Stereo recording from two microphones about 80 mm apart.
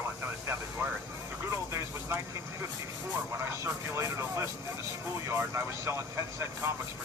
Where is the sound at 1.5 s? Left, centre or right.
Right.